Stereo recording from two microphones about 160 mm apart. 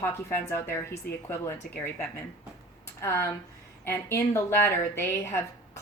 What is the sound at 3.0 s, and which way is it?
A woman's voice, 15° left (ahead or behind).